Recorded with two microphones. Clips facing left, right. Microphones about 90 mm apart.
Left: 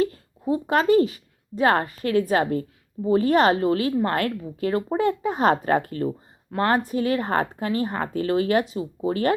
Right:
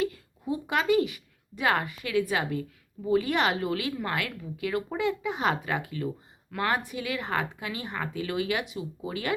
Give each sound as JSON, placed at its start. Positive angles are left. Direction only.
{"t": 0.0, "sound": "speech", "side_deg": 35}